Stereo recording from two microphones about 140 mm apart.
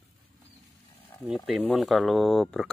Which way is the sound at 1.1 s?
20° left (ahead or behind).